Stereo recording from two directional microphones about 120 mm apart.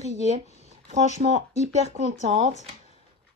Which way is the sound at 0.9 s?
75° right (ahead or behind).